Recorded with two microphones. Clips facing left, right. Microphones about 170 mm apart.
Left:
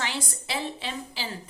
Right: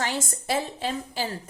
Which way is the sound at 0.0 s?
45° right (ahead or behind).